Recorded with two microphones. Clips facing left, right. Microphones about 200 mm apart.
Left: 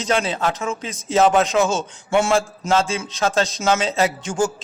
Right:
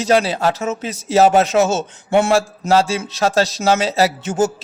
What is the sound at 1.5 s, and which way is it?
Speech, 70° right (ahead or behind).